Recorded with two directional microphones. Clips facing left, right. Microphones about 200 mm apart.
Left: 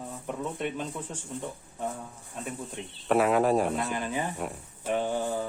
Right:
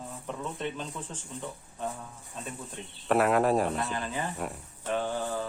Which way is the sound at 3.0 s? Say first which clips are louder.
Left 1 dB; centre (ahead or behind).